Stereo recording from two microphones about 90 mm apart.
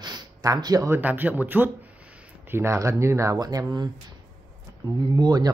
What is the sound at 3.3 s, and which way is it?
Speech, 45° right (ahead or behind).